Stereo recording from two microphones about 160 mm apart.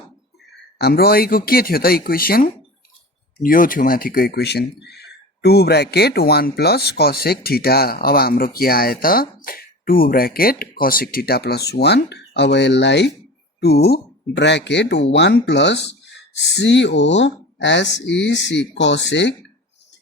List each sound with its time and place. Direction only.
0.8 s speech: 80° left